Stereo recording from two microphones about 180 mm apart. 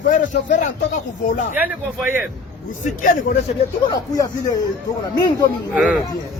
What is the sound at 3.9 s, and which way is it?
Speech, 20° left (ahead or behind).